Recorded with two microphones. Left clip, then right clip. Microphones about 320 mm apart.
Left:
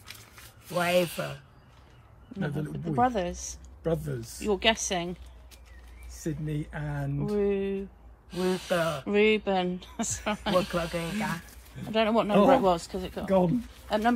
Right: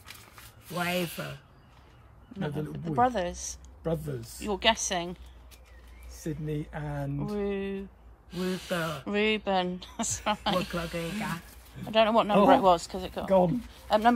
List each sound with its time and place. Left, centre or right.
0.7 s rub: centre
2.3 s a man's voice: centre
3.0 s speech: centre
6.1 s speech: centre
7.3 s speech: centre
13.2 s speech: right
13.8 s speech: centre